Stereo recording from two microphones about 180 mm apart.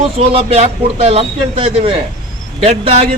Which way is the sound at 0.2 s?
35° right (ahead or behind).